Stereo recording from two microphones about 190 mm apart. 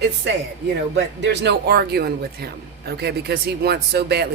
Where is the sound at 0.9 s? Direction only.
65° right (ahead or behind).